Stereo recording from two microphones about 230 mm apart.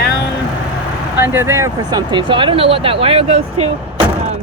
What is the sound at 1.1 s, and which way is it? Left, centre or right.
Speech, centre.